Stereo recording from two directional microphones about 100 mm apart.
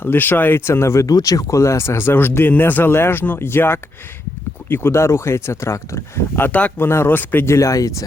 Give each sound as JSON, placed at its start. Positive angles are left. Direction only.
{"t": 0.0, "sound": "speech", "side_deg": 20}